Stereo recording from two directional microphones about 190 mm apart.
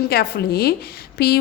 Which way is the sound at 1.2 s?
55° left (ahead or behind).